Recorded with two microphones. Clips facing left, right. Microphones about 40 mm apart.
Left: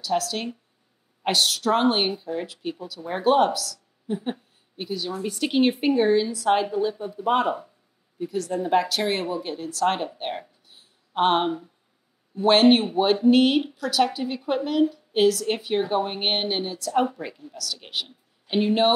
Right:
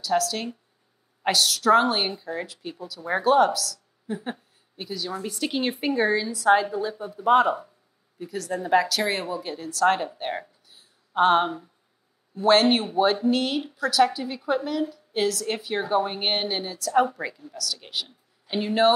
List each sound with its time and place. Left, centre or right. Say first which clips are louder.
0.0 s a woman's voice: right 1 dB; left
7.2 s speech: right 4 dB; centre
8.2 s a woman's voice: left 3 dB; left
10.7 s a sound: right 2 dB; left
12.4 s a woman's voice: left 2 dB; left